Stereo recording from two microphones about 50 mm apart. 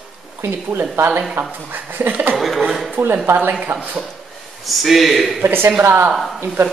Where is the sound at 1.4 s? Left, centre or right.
Right.